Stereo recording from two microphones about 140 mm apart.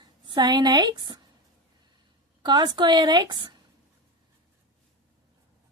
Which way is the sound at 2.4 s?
30° right (ahead or behind).